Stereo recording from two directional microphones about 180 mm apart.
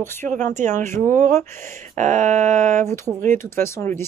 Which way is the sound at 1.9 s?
45° right (ahead or behind).